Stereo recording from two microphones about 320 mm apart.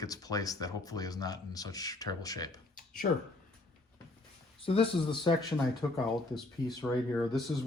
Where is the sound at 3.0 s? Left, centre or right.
Left.